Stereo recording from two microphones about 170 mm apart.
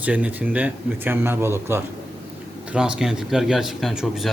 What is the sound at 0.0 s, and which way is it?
Speech, 10° right (ahead or behind).